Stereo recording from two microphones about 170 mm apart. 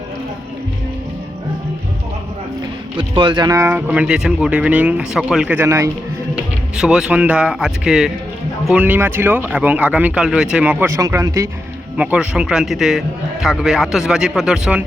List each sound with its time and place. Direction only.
3.0 s speech: 25° right (ahead or behind)
6.3 s speech: 5° right (ahead or behind)
11.9 s a man's voice: 5° right (ahead or behind)